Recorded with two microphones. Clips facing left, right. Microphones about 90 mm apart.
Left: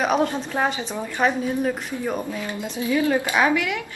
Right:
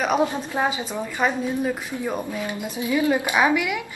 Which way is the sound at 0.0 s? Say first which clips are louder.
Even; 5° right (ahead or behind).